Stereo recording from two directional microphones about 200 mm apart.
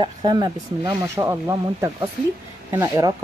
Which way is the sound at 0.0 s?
20° right (ahead or behind).